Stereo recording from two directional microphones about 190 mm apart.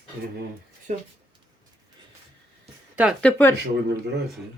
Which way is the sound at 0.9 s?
40° right (ahead or behind).